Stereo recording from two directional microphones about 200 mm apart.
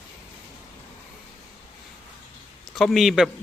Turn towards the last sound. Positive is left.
turn(degrees=0)  # may be behind; listen again after turning